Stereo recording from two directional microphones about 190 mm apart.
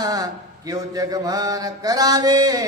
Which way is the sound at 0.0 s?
20° right (ahead or behind).